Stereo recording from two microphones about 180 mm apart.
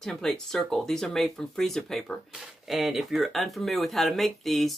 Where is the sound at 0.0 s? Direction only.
Centre (ahead or behind).